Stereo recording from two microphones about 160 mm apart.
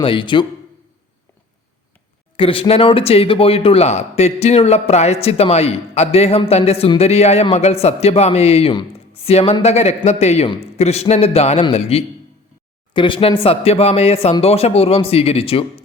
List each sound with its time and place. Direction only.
0.0 s speech: 30° left (ahead or behind)
2.3 s speech: 35° left (ahead or behind)